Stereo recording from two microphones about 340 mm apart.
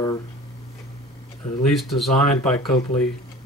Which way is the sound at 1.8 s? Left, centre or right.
Centre.